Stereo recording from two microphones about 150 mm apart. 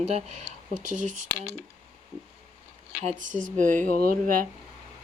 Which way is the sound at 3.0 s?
50° right (ahead or behind).